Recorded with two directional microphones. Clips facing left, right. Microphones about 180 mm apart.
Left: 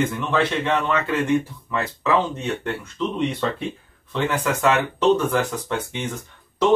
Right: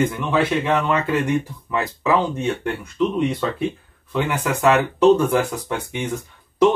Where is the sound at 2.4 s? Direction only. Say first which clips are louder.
Right 3 dB; 10° right (ahead or behind).